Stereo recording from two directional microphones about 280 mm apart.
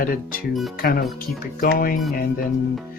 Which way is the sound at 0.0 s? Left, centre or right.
Left.